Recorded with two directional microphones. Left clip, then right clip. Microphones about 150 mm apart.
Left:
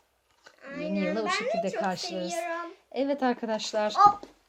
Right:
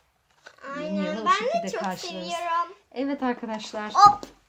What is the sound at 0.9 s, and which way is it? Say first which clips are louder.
Speech: right 5 dB; 40° left (ahead or behind).